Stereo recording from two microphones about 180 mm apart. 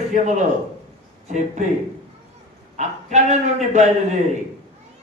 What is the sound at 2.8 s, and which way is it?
Speech, 40° right (ahead or behind).